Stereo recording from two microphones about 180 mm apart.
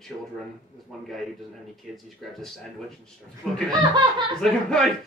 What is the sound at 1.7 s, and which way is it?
Speech, centre (ahead or behind).